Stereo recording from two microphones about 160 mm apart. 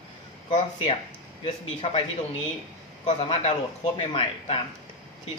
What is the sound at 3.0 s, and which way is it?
Speech, 30° left (ahead or behind).